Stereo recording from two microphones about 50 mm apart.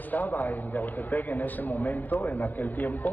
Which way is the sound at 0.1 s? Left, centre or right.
Left.